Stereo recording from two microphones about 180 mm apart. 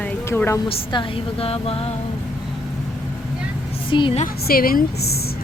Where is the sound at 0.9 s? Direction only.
30° left (ahead or behind).